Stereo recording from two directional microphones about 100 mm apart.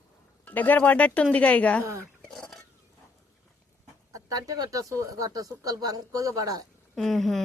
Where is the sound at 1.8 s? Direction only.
30° right (ahead or behind).